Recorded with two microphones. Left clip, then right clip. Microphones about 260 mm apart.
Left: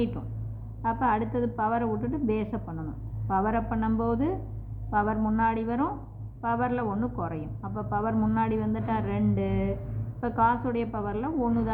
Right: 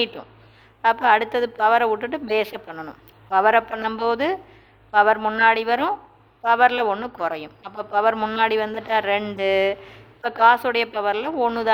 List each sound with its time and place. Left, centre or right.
0.8 s a woman's voice: right